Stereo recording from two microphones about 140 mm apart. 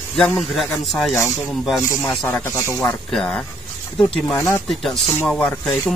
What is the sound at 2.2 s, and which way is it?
Speech, 15° left (ahead or behind).